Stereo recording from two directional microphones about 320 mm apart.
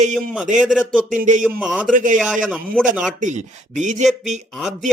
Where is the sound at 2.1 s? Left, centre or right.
Centre.